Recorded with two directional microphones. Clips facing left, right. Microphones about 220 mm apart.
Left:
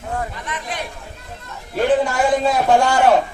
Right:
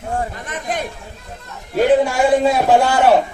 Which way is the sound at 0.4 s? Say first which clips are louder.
Right 4 dB; 45° right (ahead or behind).